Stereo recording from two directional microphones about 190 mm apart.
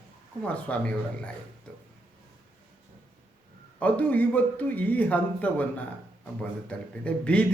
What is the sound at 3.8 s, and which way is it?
Speech, 10° left (ahead or behind).